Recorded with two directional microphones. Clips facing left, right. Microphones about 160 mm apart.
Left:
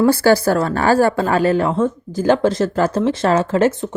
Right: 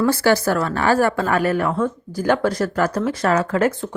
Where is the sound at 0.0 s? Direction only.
30° left (ahead or behind).